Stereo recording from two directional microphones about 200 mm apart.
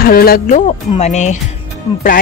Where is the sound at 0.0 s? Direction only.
50° left (ahead or behind).